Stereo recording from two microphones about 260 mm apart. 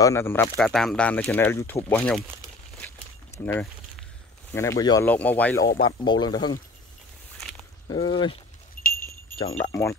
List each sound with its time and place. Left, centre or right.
0.0 s speech: centre
3.4 s speech: centre
7.9 s speech: centre
8.8 s a sound: left
9.6 s speech: centre